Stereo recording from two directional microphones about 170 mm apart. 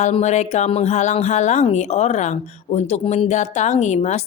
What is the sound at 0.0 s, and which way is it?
Speech, 40° left (ahead or behind).